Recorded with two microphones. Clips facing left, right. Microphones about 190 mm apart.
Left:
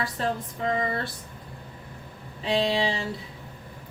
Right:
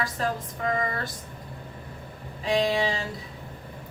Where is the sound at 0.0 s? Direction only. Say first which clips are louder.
Even; 30° left (ahead or behind).